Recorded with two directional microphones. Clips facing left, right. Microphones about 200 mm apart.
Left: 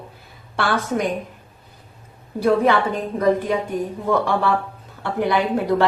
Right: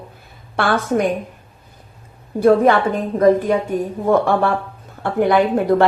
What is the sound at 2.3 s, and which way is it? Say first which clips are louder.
Speech: right 5 dB; 50° right (ahead or behind).